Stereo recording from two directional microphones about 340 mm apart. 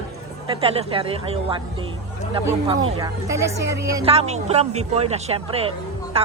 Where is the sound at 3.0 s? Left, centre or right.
Centre.